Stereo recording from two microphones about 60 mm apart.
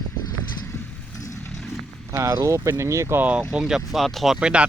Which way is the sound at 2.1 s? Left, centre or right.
Right.